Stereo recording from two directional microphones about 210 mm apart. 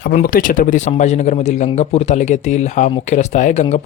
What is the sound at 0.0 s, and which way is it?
Speech, 40° left (ahead or behind).